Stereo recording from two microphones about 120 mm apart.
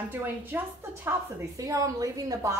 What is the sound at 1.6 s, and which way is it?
A woman's voice, 30° right (ahead or behind).